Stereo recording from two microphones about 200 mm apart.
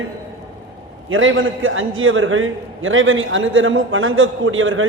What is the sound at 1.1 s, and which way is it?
A man's voice, 75° right (ahead or behind).